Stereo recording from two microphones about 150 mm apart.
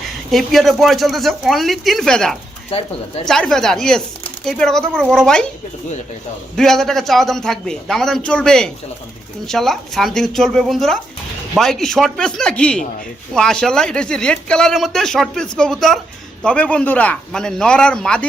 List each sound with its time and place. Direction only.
0.3 s speech: centre (ahead or behind)
2.6 s speech: 40° left (ahead or behind)
3.2 s speech: 5° left (ahead or behind)
6.6 s speech: centre (ahead or behind)